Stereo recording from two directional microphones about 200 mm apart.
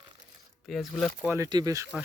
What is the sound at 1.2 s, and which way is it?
Speech, 15° right (ahead or behind).